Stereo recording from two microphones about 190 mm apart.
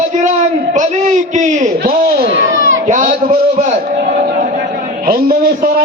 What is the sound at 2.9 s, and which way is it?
Speech, 45° right (ahead or behind).